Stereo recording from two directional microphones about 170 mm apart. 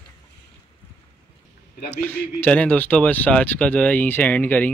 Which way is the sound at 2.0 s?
10° left (ahead or behind).